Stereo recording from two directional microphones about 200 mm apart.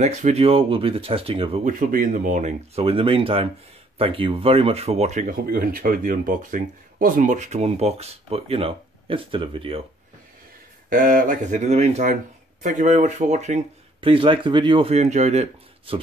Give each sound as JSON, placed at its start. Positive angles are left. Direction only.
{"t": 0.0, "sound": "speech", "side_deg": -35}
{"t": 1.7, "sound": "speech", "side_deg": -40}
{"t": 10.9, "sound": "speech", "side_deg": -45}
{"t": 14.0, "sound": "speech", "side_deg": -25}